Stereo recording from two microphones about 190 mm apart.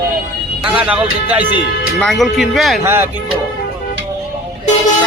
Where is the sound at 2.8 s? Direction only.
10° right (ahead or behind).